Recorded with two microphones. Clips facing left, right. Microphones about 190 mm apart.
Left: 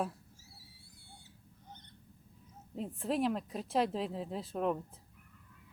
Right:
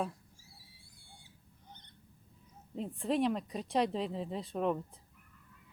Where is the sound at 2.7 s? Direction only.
Centre (ahead or behind).